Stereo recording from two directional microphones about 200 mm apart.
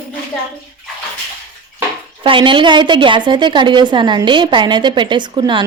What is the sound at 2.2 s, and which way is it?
A woman's voice, 25° right (ahead or behind).